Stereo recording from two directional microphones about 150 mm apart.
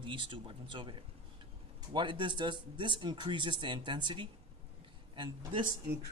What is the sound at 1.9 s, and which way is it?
Speech, 30° right (ahead or behind).